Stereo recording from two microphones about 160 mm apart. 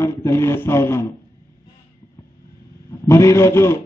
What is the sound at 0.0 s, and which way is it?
Speech, 15° left (ahead or behind).